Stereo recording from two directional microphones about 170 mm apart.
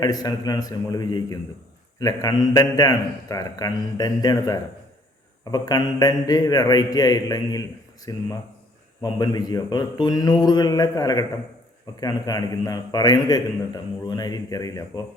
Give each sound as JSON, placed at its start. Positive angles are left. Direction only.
{"t": 0.0, "sound": "a man's voice", "side_deg": 20}